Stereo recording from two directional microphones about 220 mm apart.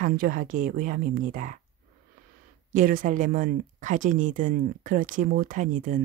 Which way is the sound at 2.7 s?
40° right (ahead or behind).